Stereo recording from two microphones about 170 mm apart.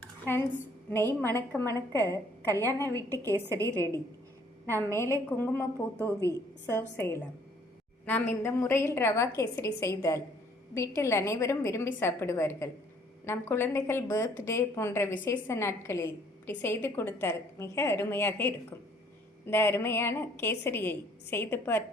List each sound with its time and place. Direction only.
0.9 s a woman's voice: 15° left (ahead or behind)
3.1 s a woman's voice: 15° right (ahead or behind)
4.8 s a woman's voice: 15° left (ahead or behind)
8.4 s a woman's voice: 15° left (ahead or behind)